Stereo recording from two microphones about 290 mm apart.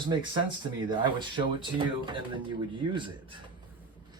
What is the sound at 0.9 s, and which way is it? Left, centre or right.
Speech, centre.